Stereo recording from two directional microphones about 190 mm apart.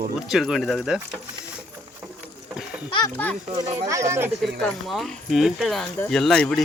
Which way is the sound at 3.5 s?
20° right (ahead or behind).